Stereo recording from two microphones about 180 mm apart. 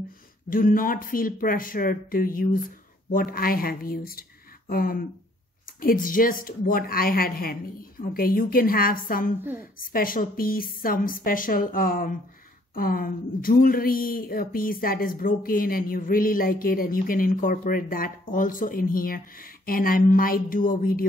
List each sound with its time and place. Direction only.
0.5 s a woman's voice: 50° left (ahead or behind)